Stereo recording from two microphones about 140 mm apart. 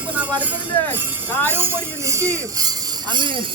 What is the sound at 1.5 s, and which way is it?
Speech, 15° right (ahead or behind).